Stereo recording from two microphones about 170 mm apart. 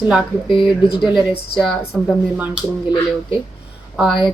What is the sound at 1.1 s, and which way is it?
Speech, centre (ahead or behind).